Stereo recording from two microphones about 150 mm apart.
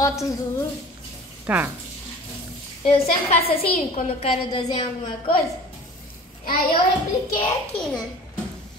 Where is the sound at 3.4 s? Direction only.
90° left.